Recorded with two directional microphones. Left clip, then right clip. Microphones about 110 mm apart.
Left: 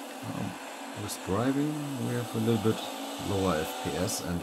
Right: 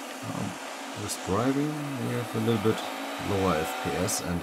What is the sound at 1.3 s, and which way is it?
Speech, 45° right (ahead or behind).